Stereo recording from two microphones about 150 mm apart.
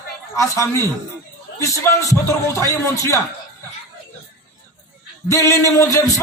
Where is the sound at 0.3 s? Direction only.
20° left (ahead or behind).